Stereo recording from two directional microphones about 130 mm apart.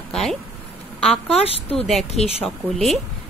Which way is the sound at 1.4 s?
50° left (ahead or behind).